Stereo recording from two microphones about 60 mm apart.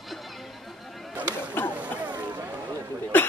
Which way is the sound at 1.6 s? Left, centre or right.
Left.